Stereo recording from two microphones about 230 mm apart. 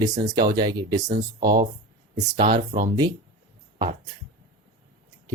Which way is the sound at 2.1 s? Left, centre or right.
Right.